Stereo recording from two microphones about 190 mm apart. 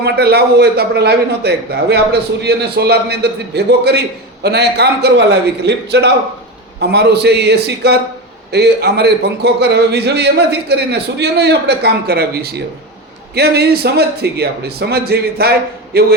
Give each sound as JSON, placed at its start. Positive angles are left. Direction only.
{"t": 0.0, "sound": "a man's voice", "side_deg": -55}